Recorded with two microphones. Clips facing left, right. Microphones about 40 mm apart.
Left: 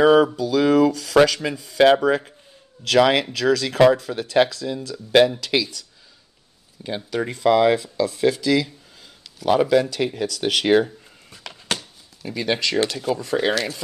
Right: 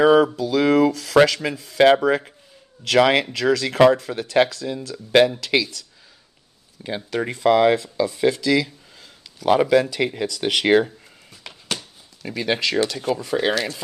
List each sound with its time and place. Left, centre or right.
0.0 s speech: centre
0.4 s speech: centre
3.7 s speech: right
4.0 s speech: centre
6.8 s speech: centre
9.5 s speech: centre
12.3 s speech: centre